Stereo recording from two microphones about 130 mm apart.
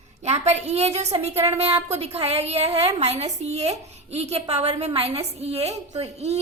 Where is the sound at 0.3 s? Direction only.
55° right (ahead or behind).